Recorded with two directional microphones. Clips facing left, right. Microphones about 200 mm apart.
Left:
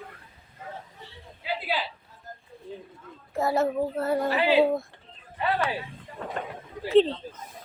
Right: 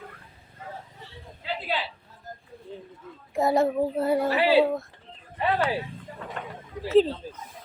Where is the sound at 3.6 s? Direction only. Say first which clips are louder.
Right 2 dB; 10° right (ahead or behind).